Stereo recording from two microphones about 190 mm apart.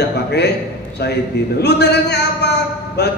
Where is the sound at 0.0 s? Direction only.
60° left (ahead or behind).